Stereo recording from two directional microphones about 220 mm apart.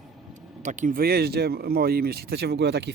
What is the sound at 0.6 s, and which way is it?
Speech, 35° right (ahead or behind).